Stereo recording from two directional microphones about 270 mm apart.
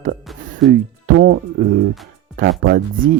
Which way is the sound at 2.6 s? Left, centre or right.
Right.